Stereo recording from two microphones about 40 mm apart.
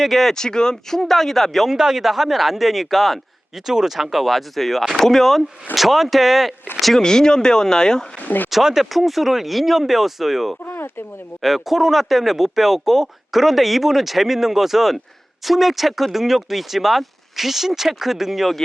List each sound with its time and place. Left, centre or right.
0.0 s speech: centre
0.3 s speech: centre
1.6 s speech: centre
7.0 s speech: centre
8.2 s speech: left
8.4 s speech: centre
10.7 s speech: left
11.4 s speech: centre